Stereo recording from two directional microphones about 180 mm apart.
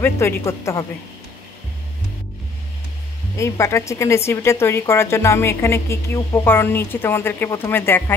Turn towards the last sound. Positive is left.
turn(degrees=10)  # may be behind; listen again after turning